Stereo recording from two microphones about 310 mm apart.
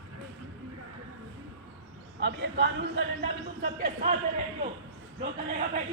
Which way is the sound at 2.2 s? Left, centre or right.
Right.